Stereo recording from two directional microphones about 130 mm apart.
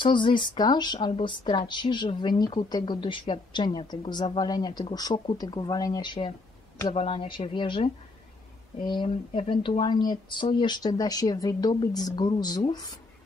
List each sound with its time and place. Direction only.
0.0 s speech: 40° left (ahead or behind)
8.8 s speech: 40° left (ahead or behind)